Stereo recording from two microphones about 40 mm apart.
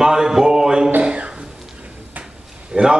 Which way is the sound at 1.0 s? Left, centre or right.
Right.